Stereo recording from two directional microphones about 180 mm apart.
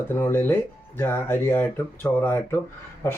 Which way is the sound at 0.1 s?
15° left (ahead or behind).